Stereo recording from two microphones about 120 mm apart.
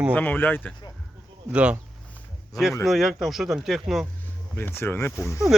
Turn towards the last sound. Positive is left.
turn(degrees=20)  # may be behind; listen again after turning